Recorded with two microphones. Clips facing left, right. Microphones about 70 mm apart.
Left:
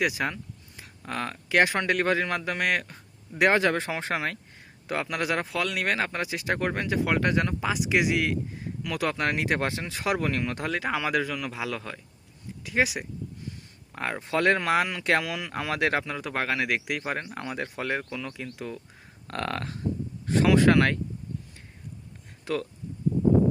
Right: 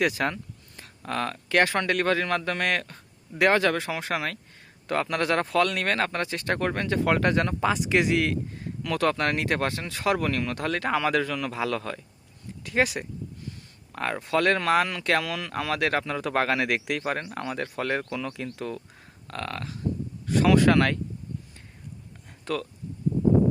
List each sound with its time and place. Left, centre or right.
0.0 s speech: centre; by 4.4 s left
4.9 s speech: centre
10.7 s speech: centre
16.0 s speech: centre
19.3 s a sound: left
20.2 s speech: left
22.5 s speech: centre